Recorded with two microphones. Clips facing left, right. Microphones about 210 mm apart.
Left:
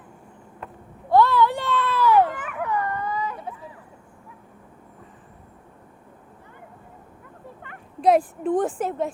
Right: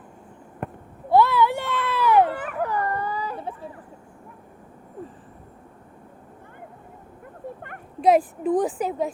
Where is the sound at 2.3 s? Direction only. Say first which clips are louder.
Right 1 dB; 35° right (ahead or behind).